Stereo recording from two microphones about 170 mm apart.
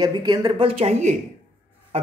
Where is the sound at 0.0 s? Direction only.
25° right (ahead or behind).